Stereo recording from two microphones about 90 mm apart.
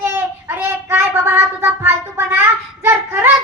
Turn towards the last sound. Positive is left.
turn(degrees=-25)  # may be behind; listen again after turning